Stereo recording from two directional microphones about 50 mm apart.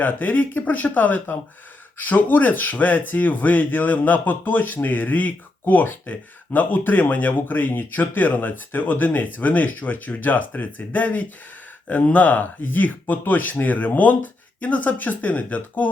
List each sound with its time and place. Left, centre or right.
0.0 s speech: left